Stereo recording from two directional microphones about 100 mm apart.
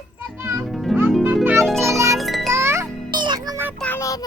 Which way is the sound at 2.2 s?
Centre (ahead or behind).